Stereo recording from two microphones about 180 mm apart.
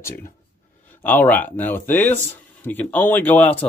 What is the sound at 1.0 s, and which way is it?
Speech, 10° left (ahead or behind).